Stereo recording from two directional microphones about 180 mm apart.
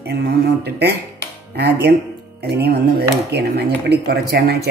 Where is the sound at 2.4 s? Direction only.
60° right (ahead or behind).